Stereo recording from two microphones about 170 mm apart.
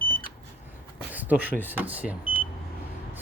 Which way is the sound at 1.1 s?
10° right (ahead or behind).